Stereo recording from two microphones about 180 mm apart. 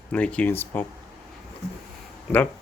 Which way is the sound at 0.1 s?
5° left (ahead or behind).